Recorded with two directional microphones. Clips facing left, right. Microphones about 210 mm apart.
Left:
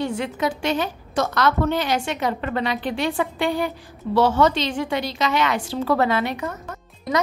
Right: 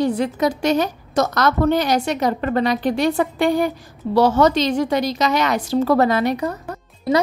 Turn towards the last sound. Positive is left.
turn(degrees=-35)  # may be behind; listen again after turning